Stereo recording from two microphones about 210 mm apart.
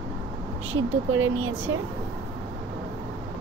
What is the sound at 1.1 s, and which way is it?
Speech, 75° right (ahead or behind).